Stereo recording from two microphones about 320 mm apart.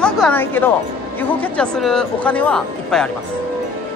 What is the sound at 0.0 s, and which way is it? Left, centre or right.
Speech, centre.